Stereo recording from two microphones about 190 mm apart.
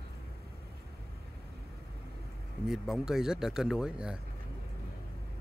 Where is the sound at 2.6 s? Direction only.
Centre (ahead or behind).